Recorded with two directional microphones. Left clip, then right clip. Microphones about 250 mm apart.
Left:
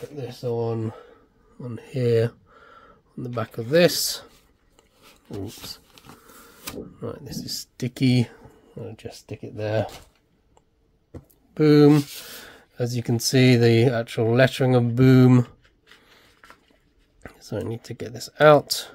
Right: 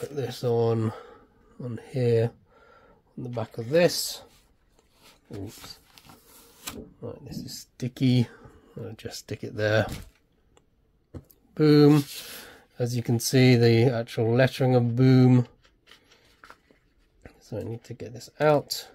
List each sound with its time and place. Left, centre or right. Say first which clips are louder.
0.1 s speech: right 2 dB; right
1.6 s speech: left 2 dB; centre
5.3 s speech: left 5 dB; left
6.0 s a sound: left 4 dB; centre
7.0 s speech: left 5 dB; left; by 9.8 s centre
11.1 s speech: left 2 dB; centre
17.2 s speech: left 5 dB; centre